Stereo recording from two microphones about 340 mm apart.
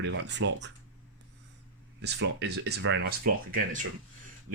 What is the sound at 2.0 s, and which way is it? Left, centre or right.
Speech, right.